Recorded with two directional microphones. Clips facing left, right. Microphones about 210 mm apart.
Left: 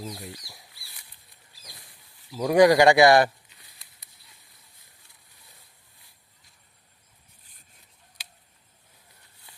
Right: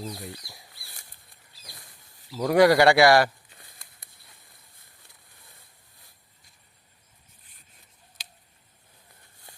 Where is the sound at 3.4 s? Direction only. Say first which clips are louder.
Right 4 dB; 50° right (ahead or behind).